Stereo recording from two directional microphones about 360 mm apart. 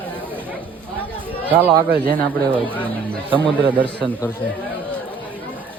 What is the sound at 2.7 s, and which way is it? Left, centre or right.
Speech, centre.